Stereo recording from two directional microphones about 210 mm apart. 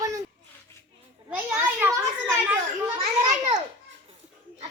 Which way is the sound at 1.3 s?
5° right (ahead or behind).